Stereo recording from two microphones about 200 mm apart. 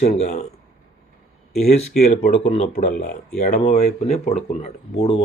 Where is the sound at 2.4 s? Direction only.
35° left (ahead or behind).